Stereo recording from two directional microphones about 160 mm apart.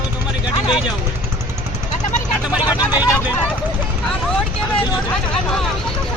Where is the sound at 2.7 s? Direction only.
25° left (ahead or behind).